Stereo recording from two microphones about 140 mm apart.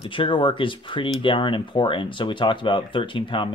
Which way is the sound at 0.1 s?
35° left (ahead or behind).